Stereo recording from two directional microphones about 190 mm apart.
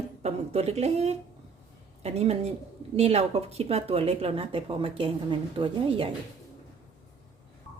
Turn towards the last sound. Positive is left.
turn(degrees=-25)  # may be behind; listen again after turning